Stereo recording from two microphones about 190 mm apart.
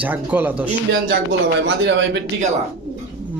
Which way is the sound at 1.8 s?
70° right (ahead or behind).